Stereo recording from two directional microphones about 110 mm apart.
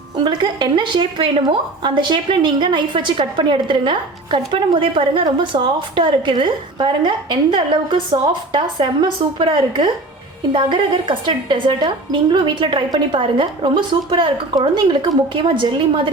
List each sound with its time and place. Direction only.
0.3 s speech: 45° right (ahead or behind)